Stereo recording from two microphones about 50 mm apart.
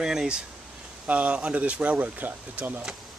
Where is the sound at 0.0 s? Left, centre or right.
Centre.